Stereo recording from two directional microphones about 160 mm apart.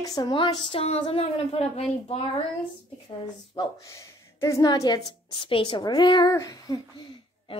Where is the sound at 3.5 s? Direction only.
20° left (ahead or behind).